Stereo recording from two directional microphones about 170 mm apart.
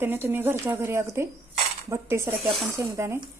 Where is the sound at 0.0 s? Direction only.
15° right (ahead or behind).